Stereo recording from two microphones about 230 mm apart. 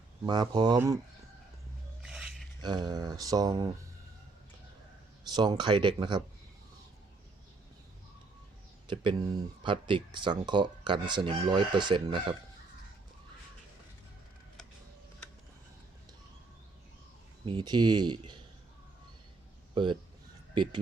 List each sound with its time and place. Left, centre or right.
0.3 s speech: centre
2.0 s a sound: centre
2.6 s speech: centre
5.3 s speech: centre
8.9 s speech: centre
17.4 s speech: centre
19.7 s speech: centre